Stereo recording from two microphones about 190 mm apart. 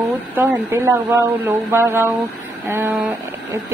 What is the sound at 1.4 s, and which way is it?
A woman's voice, 15° right (ahead or behind).